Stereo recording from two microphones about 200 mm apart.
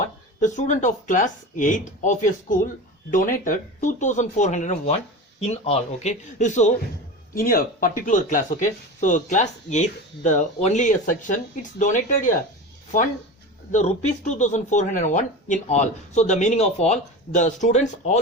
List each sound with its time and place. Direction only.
0.3 s speech: 40° left (ahead or behind)
13.7 s speech: 35° left (ahead or behind)